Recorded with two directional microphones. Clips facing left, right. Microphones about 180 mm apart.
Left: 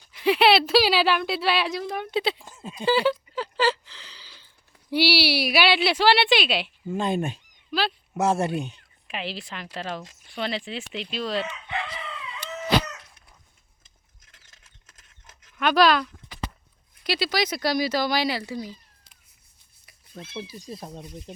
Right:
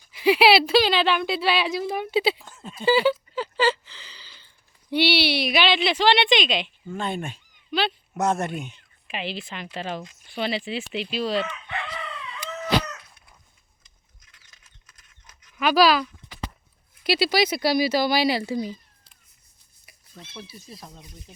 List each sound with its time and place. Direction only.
0.1 s speech: 5° right (ahead or behind)
2.4 s speech: 10° left (ahead or behind)
2.8 s speech: centre (ahead or behind)
6.8 s speech: 15° left (ahead or behind)
7.7 s speech: centre (ahead or behind)
8.5 s speech: 35° left (ahead or behind)
9.0 s speech: centre (ahead or behind)
15.5 s speech: 5° right (ahead or behind)
18.3 s speech: 20° right (ahead or behind)